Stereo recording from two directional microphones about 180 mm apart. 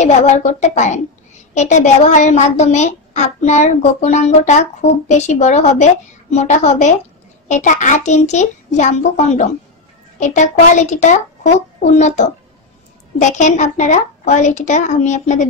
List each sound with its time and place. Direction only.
0.0 s a woman's voice: 40° left (ahead or behind)